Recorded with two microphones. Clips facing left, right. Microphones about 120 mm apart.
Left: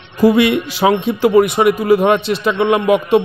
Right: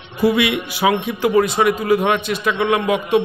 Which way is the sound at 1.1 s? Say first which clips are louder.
Left 5 dB; 30° left (ahead or behind).